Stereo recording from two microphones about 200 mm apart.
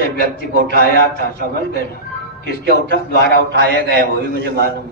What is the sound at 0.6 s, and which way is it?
Speech, 50° right (ahead or behind).